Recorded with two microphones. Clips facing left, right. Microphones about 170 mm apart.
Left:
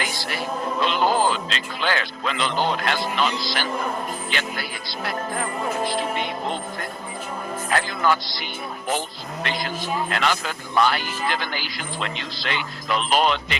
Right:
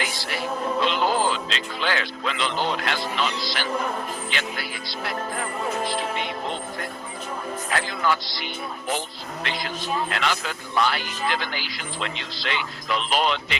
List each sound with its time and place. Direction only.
0.8 s a man's voice: 50° left (ahead or behind)
7.7 s speech: 45° left (ahead or behind)